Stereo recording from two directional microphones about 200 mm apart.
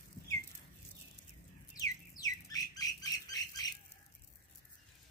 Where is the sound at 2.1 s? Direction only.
20° left (ahead or behind).